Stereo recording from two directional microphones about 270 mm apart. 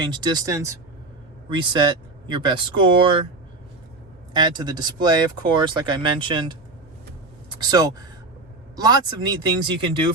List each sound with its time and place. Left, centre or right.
0.0 s speech: centre
4.4 s speech: centre
7.6 s speech: centre